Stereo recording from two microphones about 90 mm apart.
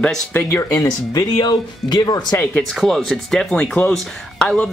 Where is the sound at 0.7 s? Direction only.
45° left (ahead or behind).